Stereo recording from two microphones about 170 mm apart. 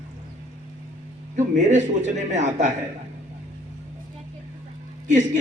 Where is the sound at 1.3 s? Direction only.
45° right (ahead or behind).